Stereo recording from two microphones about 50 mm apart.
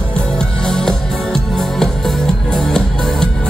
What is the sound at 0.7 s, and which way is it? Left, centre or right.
Music, centre.